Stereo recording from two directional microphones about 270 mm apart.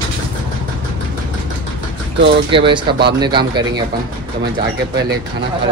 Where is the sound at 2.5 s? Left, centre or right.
Centre.